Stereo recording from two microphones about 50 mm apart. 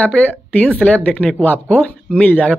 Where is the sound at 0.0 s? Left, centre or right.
Left.